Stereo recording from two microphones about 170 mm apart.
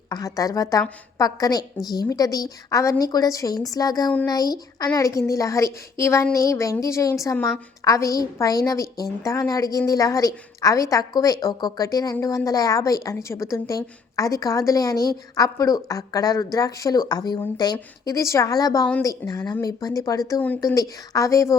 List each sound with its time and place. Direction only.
0.1 s a woman's voice: 20° left (ahead or behind)